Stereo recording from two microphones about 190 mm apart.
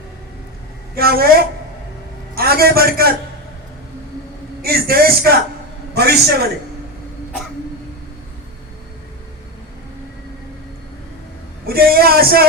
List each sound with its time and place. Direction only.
0.9 s a man's voice: 55° right (ahead or behind)
4.6 s a man's voice: 55° right (ahead or behind)
11.6 s a man's voice: 55° right (ahead or behind)